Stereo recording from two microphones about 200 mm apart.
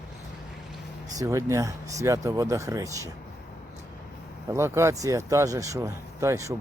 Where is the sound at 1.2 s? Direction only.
15° right (ahead or behind).